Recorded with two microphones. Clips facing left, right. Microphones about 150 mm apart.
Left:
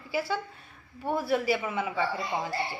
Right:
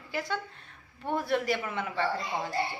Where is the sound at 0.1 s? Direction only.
5° left (ahead or behind).